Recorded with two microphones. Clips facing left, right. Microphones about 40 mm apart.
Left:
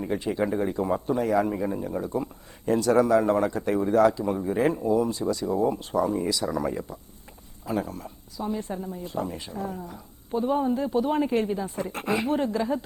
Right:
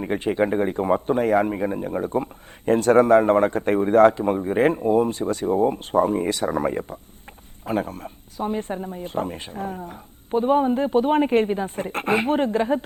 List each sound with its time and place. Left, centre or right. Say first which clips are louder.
0.0 s a man's voice: right 5 dB; right